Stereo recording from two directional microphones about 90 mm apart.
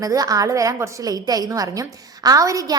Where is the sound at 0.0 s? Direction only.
40° right (ahead or behind).